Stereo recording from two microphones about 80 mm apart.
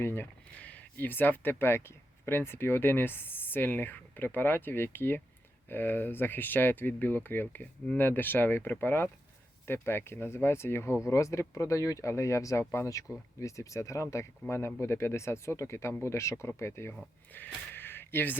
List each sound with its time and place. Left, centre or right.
0.0 s speech: left
0.6 s speech: centre